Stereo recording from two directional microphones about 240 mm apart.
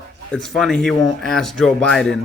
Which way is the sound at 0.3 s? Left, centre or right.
Centre.